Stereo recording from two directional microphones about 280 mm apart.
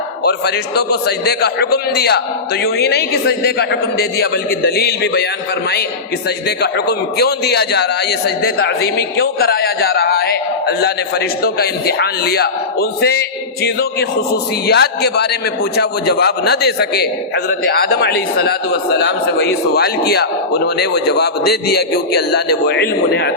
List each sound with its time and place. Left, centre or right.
0.3 s a man's voice: left
6.6 s a man's voice: left